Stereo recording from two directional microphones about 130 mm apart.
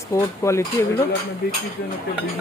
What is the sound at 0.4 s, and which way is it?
Speech, 20° left (ahead or behind).